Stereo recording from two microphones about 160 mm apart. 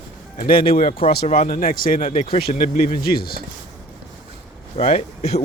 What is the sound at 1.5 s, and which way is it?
Speech, 65° left (ahead or behind).